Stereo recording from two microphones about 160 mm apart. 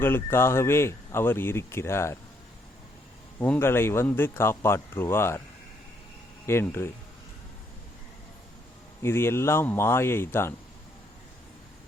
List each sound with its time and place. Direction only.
0.0 s speech: 15° left (ahead or behind)
3.4 s speech: 15° left (ahead or behind)
6.4 s speech: 15° left (ahead or behind)
9.0 s speech: 15° left (ahead or behind)